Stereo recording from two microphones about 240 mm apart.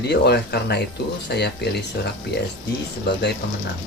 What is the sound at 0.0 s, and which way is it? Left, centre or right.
Speech, left.